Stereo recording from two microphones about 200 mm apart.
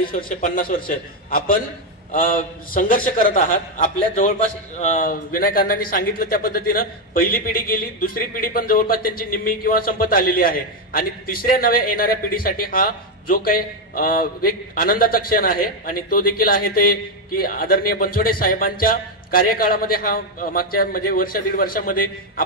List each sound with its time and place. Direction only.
0.0 s a man's voice: 45° left (ahead or behind)